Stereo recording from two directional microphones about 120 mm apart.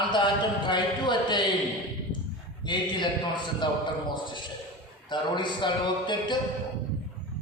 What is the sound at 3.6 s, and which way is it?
Speech, 40° left (ahead or behind).